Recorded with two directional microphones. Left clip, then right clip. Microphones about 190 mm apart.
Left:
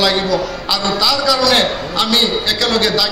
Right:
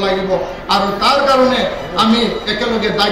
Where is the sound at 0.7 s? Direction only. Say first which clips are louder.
Right 2 dB; 45° left (ahead or behind).